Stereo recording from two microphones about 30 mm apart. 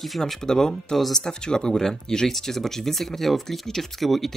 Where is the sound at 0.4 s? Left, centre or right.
Centre.